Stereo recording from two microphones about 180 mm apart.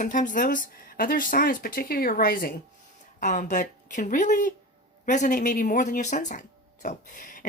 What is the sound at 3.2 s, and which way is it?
A woman's voice, 45° left (ahead or behind).